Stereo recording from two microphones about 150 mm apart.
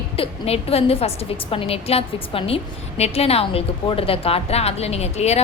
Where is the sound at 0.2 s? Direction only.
40° left (ahead or behind).